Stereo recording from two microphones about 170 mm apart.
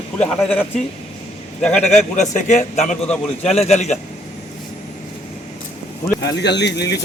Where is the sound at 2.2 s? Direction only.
45° left (ahead or behind).